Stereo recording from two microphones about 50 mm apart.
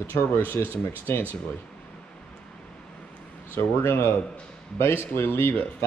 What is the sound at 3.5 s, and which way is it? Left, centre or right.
Speech, left.